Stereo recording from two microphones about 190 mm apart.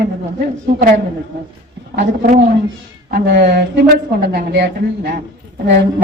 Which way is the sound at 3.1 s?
55° right (ahead or behind).